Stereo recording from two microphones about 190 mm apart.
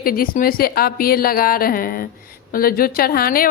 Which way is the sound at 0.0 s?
50° left (ahead or behind).